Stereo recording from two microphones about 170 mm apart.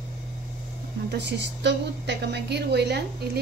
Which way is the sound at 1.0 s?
85° right.